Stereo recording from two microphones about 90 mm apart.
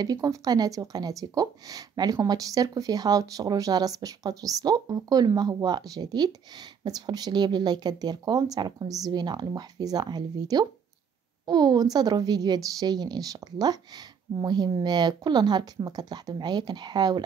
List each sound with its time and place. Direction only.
0.0 s a woman's voice: 45° right (ahead or behind)